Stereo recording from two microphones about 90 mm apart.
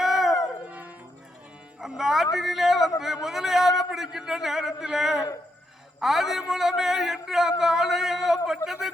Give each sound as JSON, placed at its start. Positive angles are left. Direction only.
{"t": 0.0, "sound": "howl", "side_deg": -5}
{"t": 0.7, "sound": "dog", "side_deg": -15}
{"t": 1.8, "sound": "a man's voice", "side_deg": -5}